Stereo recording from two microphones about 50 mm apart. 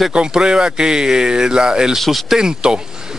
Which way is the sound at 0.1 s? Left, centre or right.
Centre.